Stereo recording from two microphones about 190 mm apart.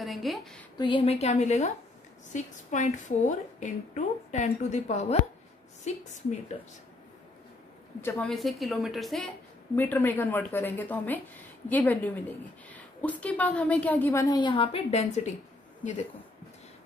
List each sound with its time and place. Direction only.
0.0 s a woman's voice: centre (ahead or behind)
0.7 s a woman's voice: 25° left (ahead or behind)
8.0 s a woman's voice: 5° left (ahead or behind); by 15.3 s 35° left (ahead or behind)